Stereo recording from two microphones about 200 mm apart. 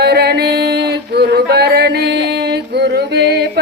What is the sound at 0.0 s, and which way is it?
Music, 55° right (ahead or behind).